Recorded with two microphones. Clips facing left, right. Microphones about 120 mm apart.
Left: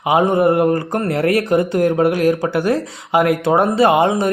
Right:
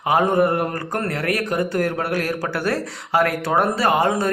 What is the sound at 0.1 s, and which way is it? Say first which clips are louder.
Speech: left 4 dB; 20° left (ahead or behind).